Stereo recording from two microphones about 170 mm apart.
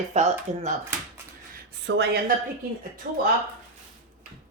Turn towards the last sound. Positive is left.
turn(degrees=-60)  # may be behind; listen again after turning